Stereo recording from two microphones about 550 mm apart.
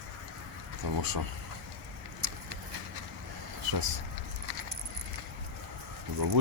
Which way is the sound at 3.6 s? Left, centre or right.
Right.